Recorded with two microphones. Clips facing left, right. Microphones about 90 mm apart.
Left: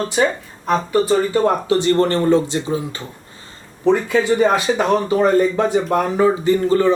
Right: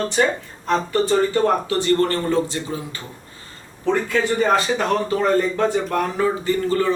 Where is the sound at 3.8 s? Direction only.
15° left (ahead or behind).